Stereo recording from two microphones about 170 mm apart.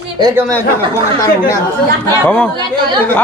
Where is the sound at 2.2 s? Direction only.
5° left (ahead or behind).